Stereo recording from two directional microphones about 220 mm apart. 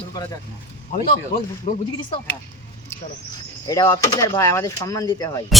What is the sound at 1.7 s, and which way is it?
Speech, 30° left (ahead or behind).